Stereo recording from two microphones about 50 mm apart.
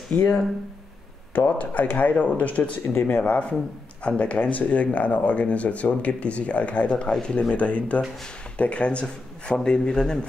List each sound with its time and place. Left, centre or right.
0.1 s speech: left
1.3 s speech: left
2.9 s speech: left
3.2 s a man's voice: left